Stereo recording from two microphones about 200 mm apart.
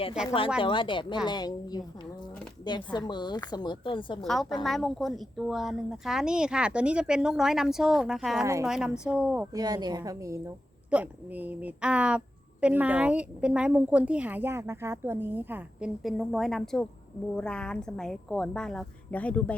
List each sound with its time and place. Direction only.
0.3 s a woman's voice: 25° left (ahead or behind)
4.2 s a woman's voice: centre (ahead or behind)
9.5 s a woman's voice: 20° right (ahead or behind); by 19.5 s 5° left (ahead or behind)